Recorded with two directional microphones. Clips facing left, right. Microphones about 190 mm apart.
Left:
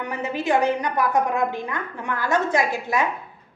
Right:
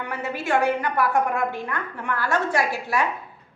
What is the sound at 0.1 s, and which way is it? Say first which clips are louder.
A woman's voice: left 2 dB; 15° left (ahead or behind).